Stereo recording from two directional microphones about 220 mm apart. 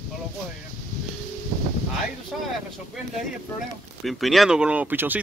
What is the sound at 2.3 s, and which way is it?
Speech, centre (ahead or behind).